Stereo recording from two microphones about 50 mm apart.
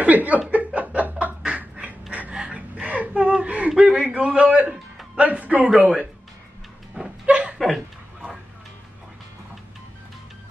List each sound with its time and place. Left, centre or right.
0.0 s speech: right
0.7 s chuckle: right
1.2 s snicker: right
2.3 s gasp: centre
2.7 s gasp: right
4.4 s speech: right
7.0 s a sound: centre
7.5 s chuckle: centre